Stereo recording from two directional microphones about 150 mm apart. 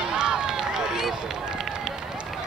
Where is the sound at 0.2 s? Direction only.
5° right (ahead or behind).